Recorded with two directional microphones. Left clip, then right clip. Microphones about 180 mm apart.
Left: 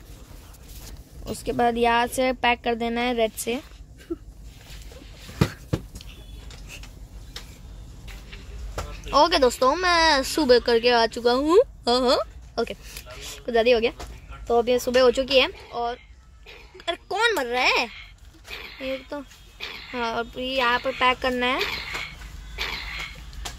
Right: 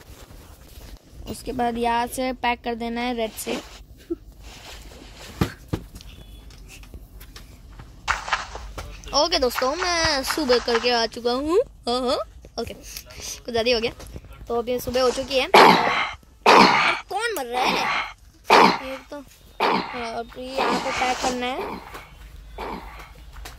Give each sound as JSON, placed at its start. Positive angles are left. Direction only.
{"t": 1.2, "sound": "speech", "side_deg": 0}
{"t": 8.9, "sound": "speech", "side_deg": 5}
{"t": 15.5, "sound": "cough", "side_deg": -55}
{"t": 17.1, "sound": "a sound", "side_deg": 0}
{"t": 17.9, "sound": "dog", "side_deg": -10}
{"t": 20.0, "sound": "speech", "side_deg": 5}
{"t": 22.6, "sound": "a sound", "side_deg": -10}